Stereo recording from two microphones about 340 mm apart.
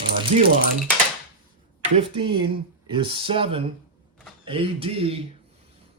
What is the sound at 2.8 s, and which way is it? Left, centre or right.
Speech, centre.